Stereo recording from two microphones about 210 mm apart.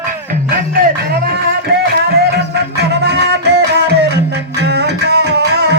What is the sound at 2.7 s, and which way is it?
Music, 50° right (ahead or behind).